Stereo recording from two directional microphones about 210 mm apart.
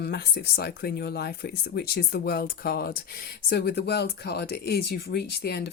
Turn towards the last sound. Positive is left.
turn(degrees=50)  # may be behind; listen again after turning